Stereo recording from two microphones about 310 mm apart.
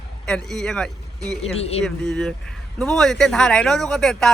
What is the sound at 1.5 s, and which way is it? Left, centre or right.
Speech, centre.